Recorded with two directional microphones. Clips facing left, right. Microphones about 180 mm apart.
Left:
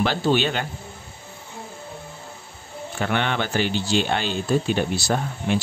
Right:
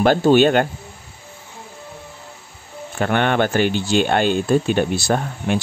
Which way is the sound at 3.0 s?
50° right (ahead or behind).